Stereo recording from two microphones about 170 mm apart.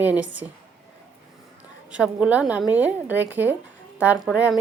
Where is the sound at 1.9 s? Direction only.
5° right (ahead or behind).